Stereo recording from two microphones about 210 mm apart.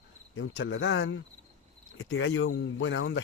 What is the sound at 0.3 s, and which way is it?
Speech, 70° left (ahead or behind).